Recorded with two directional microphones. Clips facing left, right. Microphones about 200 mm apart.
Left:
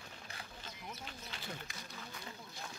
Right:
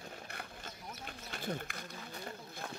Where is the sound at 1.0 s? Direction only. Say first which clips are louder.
Right 11 dB; 50° right (ahead or behind).